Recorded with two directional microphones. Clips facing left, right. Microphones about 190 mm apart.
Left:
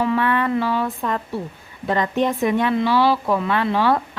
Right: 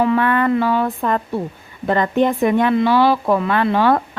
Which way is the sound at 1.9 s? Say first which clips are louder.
Right 4 dB; 55° right (ahead or behind).